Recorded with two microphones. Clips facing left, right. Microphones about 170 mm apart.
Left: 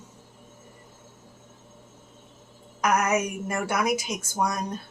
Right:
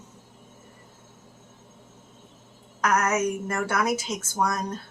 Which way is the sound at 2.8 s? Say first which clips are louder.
Even; 15° left (ahead or behind).